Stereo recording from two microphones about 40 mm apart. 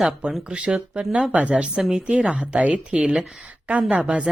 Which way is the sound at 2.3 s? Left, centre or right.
Right.